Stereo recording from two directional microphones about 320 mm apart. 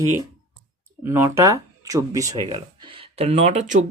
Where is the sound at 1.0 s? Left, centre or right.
Centre.